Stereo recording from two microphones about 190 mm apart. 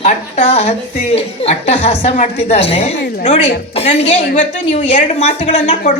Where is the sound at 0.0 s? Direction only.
30° left (ahead or behind).